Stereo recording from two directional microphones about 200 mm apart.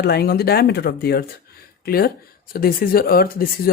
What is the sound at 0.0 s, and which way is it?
Speech, 50° left (ahead or behind).